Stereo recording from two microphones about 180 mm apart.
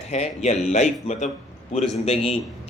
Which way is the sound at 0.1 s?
40° left (ahead or behind).